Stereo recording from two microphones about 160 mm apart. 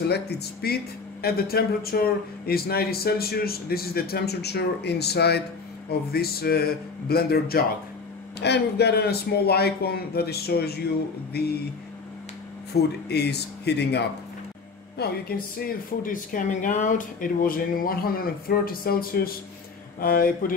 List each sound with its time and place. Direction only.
0.1 s speech: 90° left
1.2 s a man's voice: 70° left (ahead or behind); by 5.4 s 90° left
5.9 s a man's voice: 75° left (ahead or behind)
8.4 s speech: 90° left
12.7 s speech: 90° left
15.0 s speech: 70° left (ahead or behind)